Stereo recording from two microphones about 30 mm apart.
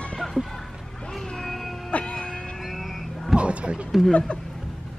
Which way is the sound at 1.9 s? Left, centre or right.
Left.